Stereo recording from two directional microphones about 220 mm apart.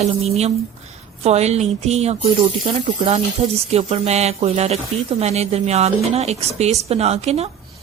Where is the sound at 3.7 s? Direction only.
25° right (ahead or behind).